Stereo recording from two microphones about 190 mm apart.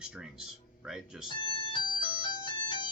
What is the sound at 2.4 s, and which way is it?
Ringtone, 25° left (ahead or behind).